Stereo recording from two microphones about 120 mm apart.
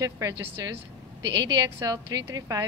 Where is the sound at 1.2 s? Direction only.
35° right (ahead or behind).